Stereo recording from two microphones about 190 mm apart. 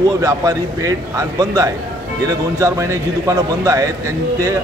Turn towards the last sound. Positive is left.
turn(degrees=-15)  # may be behind; listen again after turning